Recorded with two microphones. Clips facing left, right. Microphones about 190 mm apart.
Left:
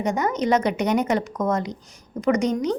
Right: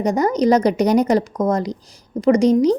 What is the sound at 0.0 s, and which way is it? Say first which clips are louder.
A woman's voice: right 6 dB; 35° right (ahead or behind).